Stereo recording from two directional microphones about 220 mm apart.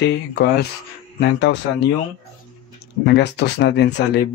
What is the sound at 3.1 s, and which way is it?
Speech, 50° left (ahead or behind).